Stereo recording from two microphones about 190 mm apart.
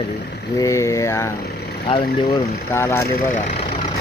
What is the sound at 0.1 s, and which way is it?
Speech, 60° left (ahead or behind).